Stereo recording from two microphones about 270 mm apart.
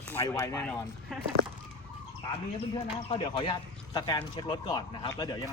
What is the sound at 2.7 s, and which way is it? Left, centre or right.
Speech, centre.